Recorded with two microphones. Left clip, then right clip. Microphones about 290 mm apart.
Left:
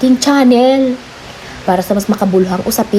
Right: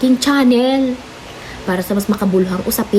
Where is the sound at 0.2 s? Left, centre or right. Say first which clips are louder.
Left 4 dB; centre.